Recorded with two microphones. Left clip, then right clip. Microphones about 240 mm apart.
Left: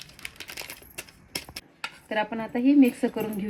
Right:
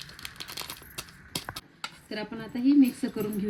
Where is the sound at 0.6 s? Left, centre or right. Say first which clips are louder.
Even; right.